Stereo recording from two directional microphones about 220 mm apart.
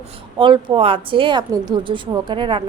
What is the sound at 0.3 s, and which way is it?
Speech, 20° right (ahead or behind).